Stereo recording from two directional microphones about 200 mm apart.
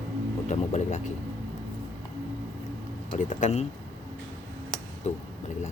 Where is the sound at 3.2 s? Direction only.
40° left (ahead or behind).